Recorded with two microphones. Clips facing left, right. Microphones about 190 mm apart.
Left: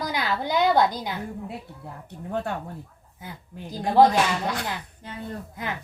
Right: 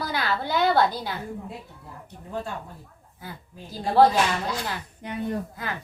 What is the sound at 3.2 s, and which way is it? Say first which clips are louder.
Speech: left 2 dB; 20° left (ahead or behind).